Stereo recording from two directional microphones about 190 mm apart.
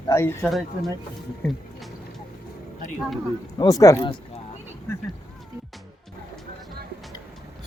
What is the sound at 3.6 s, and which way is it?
Speech, 20° left (ahead or behind).